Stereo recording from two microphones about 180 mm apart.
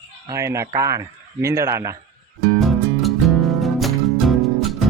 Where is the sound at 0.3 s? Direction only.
15° right (ahead or behind).